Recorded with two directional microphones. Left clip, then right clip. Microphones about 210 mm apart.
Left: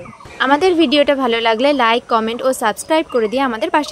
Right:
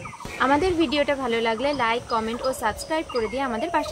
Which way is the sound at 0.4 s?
40° left (ahead or behind).